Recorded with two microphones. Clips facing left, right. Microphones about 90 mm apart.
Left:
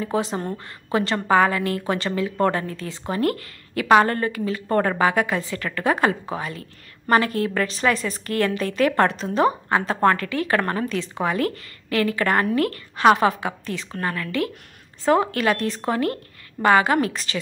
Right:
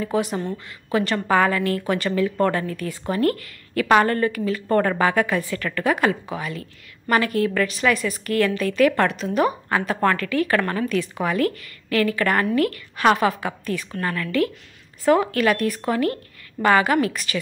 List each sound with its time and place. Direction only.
0.0 s a woman's voice: 25° left (ahead or behind)
0.4 s a woman's voice: 45° left (ahead or behind)
0.9 s a woman's voice: 25° left (ahead or behind)